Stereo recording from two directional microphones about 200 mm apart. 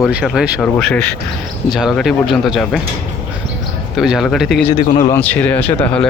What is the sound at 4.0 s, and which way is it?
Speech, centre (ahead or behind).